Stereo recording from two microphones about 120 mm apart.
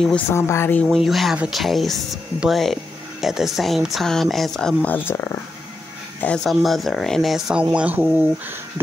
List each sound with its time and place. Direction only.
0.3 s speech: 20° left (ahead or behind)
0.7 s speech: centre (ahead or behind); by 5.4 s 20° left (ahead or behind)
6.2 s speech: 5° left (ahead or behind)